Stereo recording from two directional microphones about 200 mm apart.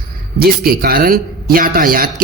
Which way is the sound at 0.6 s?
50° right (ahead or behind).